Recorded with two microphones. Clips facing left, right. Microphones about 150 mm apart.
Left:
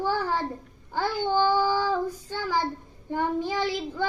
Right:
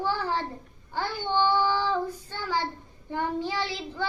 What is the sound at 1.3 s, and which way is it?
Child singing, 45° left (ahead or behind).